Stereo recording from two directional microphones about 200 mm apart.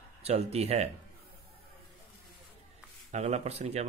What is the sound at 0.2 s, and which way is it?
Speech, 30° right (ahead or behind).